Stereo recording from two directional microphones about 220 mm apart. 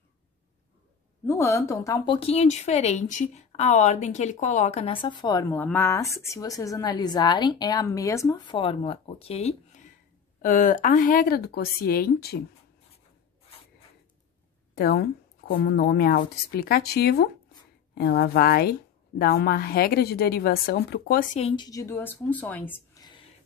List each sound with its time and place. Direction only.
1.2 s speech: 10° left (ahead or behind)
2.1 s a woman's voice: 30° left (ahead or behind); by 12.4 s 45° left (ahead or behind)
14.8 s a woman's voice: 45° left (ahead or behind); by 23.2 s 15° left (ahead or behind)